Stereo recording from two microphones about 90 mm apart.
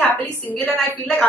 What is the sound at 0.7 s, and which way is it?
Speech, 20° left (ahead or behind).